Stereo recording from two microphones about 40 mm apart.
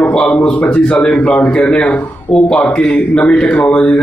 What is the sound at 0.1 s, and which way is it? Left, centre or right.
A man's voice, left.